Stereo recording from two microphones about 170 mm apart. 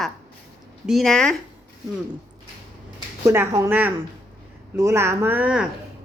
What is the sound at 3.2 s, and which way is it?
A woman's voice, 15° right (ahead or behind).